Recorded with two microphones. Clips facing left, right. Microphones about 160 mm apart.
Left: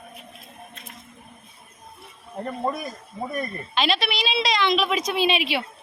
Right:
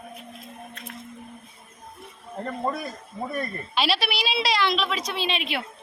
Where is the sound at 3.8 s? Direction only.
5° right (ahead or behind).